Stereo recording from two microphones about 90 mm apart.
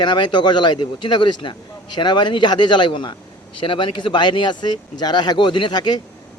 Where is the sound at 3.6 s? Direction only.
75° left (ahead or behind).